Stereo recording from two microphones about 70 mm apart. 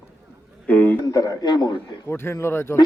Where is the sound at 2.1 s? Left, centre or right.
Left.